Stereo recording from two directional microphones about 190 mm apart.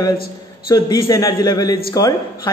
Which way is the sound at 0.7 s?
20° left (ahead or behind).